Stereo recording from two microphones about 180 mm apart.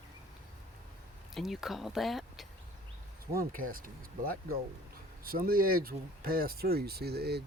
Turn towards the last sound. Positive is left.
turn(degrees=-60)  # may be behind; listen again after turning